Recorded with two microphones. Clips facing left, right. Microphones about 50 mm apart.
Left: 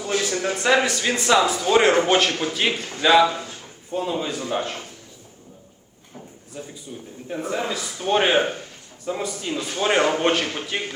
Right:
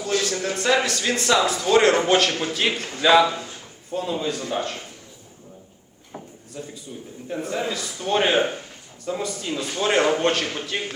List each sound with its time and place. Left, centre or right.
0.0 s a man's voice: centre
6.5 s a man's voice: centre